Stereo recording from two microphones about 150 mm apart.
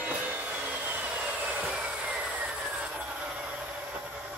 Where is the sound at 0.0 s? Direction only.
10° right (ahead or behind).